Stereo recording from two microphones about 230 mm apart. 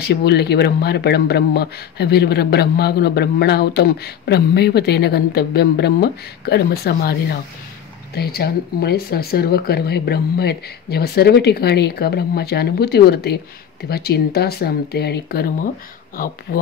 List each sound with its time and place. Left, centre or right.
0.0 s speech: left